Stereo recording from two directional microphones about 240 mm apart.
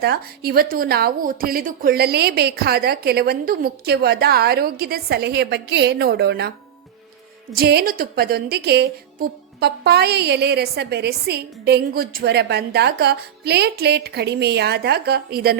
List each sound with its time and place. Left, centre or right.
0.0 s a woman's voice: right
7.5 s a woman's voice: right